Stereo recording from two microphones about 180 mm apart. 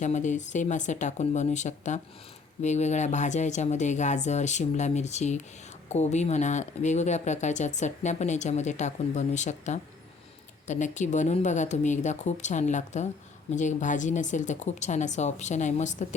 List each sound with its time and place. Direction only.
0.0 s speech: 40° left (ahead or behind)